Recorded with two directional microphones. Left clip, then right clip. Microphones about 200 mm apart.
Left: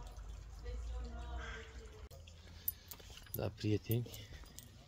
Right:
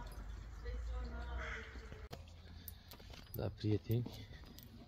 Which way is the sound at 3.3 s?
15° left (ahead or behind).